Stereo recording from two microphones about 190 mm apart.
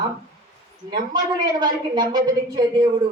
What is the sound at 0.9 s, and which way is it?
A woman's voice, 20° right (ahead or behind).